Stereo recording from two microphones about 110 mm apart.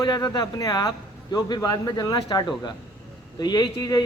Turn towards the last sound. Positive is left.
turn(degrees=35)  # may be behind; listen again after turning